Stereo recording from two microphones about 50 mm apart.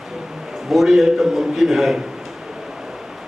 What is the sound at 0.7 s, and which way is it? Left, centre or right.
A man's voice, centre.